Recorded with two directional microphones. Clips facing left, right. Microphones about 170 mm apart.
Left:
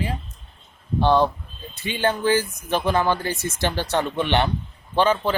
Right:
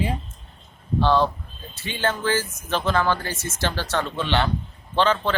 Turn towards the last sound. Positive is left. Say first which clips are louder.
# left 1 dB
turn(degrees=10)  # may be behind; listen again after turning